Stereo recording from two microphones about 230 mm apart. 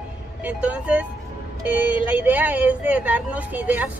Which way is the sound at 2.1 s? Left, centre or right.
Centre.